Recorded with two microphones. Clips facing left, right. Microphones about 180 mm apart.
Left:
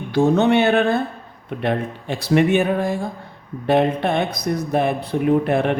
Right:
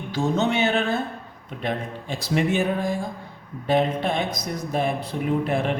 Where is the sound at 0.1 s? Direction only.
60° left (ahead or behind).